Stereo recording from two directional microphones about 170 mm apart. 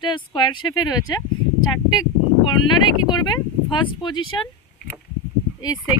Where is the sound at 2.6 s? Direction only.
25° left (ahead or behind).